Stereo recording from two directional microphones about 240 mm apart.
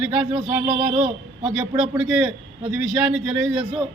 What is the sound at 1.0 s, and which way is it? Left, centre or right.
Speech, right.